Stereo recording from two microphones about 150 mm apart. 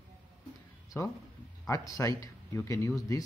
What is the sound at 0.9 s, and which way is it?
Speech, 20° left (ahead or behind).